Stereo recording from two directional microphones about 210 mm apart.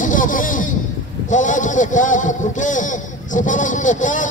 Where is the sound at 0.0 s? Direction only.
40° left (ahead or behind).